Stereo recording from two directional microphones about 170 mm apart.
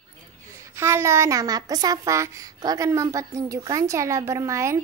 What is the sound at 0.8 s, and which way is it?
A woman's voice, 15° right (ahead or behind).